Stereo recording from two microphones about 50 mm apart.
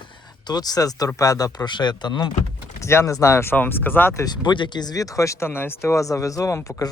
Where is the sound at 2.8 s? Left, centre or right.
Left.